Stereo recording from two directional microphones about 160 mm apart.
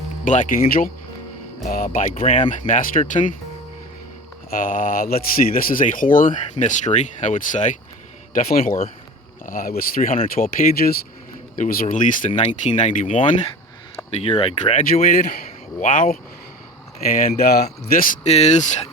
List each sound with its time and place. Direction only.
0.3 s speech: 55° left (ahead or behind)
4.5 s speech: 60° left (ahead or behind)
8.3 s speech: 65° left (ahead or behind)
12.3 s speech: 45° left (ahead or behind)
14.1 s speech: 40° left (ahead or behind)
14.8 s speech: 55° left (ahead or behind)
17.3 s speech: 75° left (ahead or behind)
18.2 s speech: 45° left (ahead or behind)